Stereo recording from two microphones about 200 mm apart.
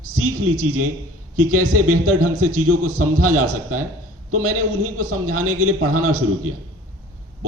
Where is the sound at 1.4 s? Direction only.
90° right.